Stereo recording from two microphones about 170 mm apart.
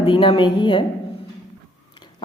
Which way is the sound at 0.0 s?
30° left (ahead or behind).